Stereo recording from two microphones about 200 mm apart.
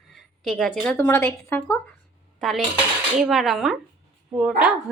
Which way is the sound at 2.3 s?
Centre (ahead or behind).